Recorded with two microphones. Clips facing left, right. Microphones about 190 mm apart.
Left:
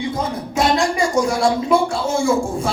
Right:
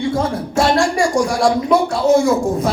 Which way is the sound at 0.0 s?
20° left (ahead or behind).